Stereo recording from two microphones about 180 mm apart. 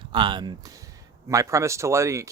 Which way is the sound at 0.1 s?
25° right (ahead or behind).